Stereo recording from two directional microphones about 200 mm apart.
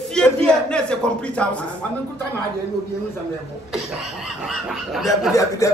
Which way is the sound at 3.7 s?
5° right (ahead or behind).